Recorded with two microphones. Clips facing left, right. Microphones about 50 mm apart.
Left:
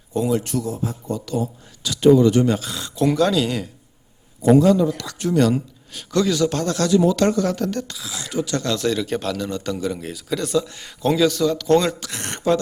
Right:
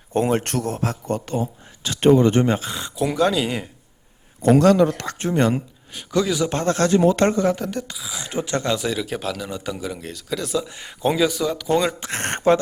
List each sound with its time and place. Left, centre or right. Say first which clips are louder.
0.1 s speech: right 1 dB; right
1.1 s speech: left 2 dB; right
2.9 s a man's voice: left 2 dB; centre
4.4 s speech: even; right
4.9 s speech: even; right
5.3 s speech: left 2 dB; right
5.9 s a man's voice: left 1 dB; centre
6.5 s speech: right 1 dB; right
7.6 s a man's voice: left 3 dB; centre
8.2 s a man's voice: even; right; by 10.7 s centre
10.7 s a man's voice: left 1 dB; centre
11.9 s speech: right 5 dB; right